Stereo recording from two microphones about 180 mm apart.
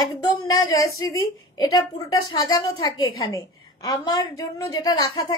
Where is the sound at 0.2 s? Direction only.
20° left (ahead or behind).